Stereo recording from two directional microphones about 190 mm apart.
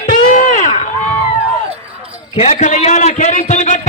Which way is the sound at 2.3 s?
35° left (ahead or behind).